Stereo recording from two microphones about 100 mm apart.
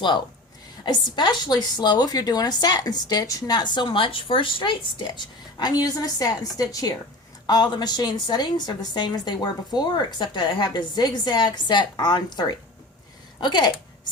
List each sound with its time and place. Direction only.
0.9 s a woman's voice: 45° left (ahead or behind)